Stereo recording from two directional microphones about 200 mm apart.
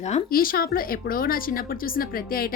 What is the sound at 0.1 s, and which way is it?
A woman's voice, 45° left (ahead or behind).